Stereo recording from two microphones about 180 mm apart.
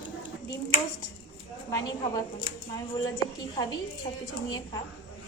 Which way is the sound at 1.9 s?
20° left (ahead or behind).